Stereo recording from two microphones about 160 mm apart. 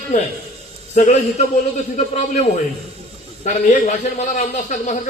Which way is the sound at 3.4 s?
50° left (ahead or behind).